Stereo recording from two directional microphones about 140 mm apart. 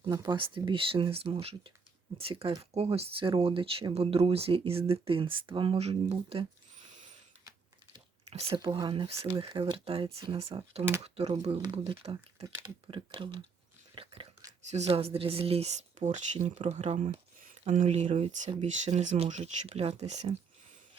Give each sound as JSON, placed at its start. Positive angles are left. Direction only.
{"t": 0.0, "sound": "speech", "side_deg": -30}
{"t": 8.3, "sound": "speech", "side_deg": -45}
{"t": 11.5, "sound": "speech", "side_deg": -30}
{"t": 11.8, "sound": "speech", "side_deg": -45}
{"t": 12.4, "sound": "speech", "side_deg": -20}
{"t": 12.9, "sound": "speech", "side_deg": -35}
{"t": 13.9, "sound": "biting", "side_deg": -40}
{"t": 14.7, "sound": "speech", "side_deg": -50}